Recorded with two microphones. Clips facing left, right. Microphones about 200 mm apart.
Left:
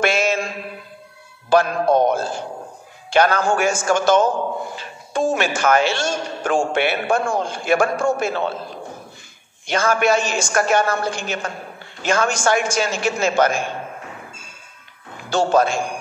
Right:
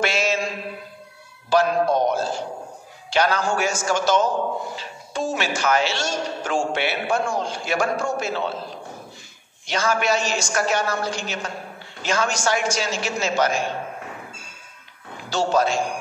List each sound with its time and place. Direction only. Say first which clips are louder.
0.0 s mantra: left 3 dB; 55° left (ahead or behind)
1.5 s a man's voice: left 3 dB; 55° left (ahead or behind)
15.2 s a man's voice: left 4 dB; 55° left (ahead or behind)